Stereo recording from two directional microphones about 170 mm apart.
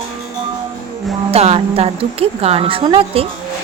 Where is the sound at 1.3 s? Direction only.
35° right (ahead or behind).